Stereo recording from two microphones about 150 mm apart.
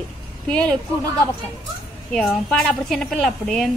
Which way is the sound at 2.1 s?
5° left (ahead or behind).